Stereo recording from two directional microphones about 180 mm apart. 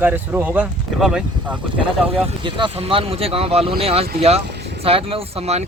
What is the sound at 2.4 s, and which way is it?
Speech, 25° right (ahead or behind).